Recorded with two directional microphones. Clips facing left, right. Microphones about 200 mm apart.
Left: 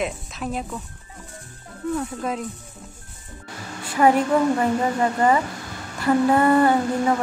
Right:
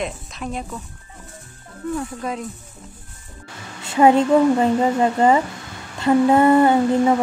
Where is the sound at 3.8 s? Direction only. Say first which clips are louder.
Right 4 dB; 25° right (ahead or behind).